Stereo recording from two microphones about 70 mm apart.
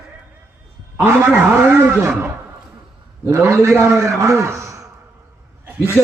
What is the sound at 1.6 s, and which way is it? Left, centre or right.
Speech, right.